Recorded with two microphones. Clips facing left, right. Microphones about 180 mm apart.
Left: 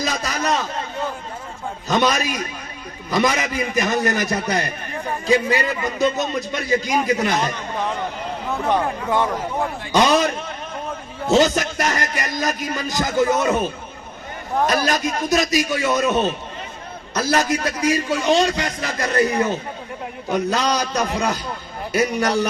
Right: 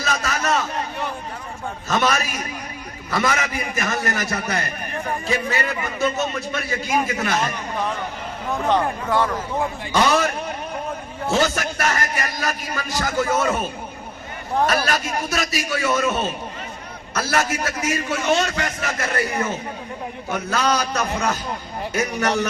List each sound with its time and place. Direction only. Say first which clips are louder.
0.0 s a sound: left 1 dB; 15° left (ahead or behind)
1.9 s speech: left 2 dB; 15° left (ahead or behind)
8.6 s speech: even; 15° left (ahead or behind)
14.7 s speech: left 2 dB; 20° left (ahead or behind)